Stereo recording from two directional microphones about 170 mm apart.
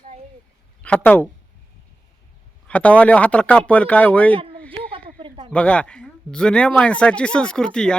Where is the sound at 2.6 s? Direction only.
10° left (ahead or behind).